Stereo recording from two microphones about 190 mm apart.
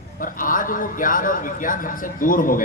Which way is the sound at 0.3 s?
45° left (ahead or behind).